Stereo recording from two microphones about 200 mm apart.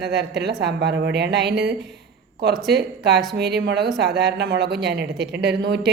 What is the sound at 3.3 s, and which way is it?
Speech, 55° right (ahead or behind).